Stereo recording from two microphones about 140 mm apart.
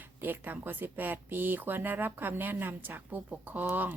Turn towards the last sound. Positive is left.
turn(degrees=-15)  # may be behind; listen again after turning